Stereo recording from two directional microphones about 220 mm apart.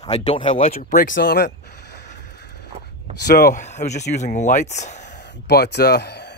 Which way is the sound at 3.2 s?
45° left (ahead or behind).